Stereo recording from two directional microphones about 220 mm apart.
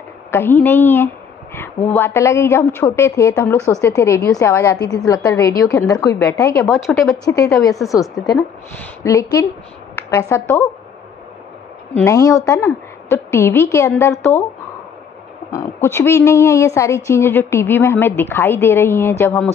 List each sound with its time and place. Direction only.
0.3 s a woman's voice: 10° left (ahead or behind)
6.7 s speech: centre (ahead or behind)
7.1 s a woman's voice: 15° left (ahead or behind)
12.0 s a woman's voice: 15° left (ahead or behind)
15.5 s a woman's voice: 10° left (ahead or behind)